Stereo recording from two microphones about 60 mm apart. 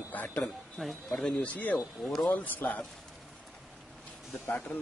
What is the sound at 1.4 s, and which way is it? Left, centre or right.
Speech, left.